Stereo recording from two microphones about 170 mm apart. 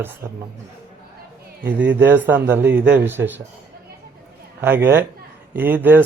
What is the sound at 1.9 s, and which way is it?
Speech, 90° right.